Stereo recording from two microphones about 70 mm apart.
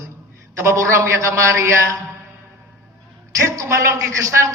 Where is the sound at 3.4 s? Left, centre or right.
Right.